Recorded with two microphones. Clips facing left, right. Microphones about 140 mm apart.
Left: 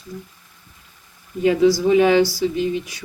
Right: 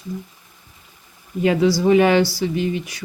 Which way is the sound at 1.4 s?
70° right (ahead or behind).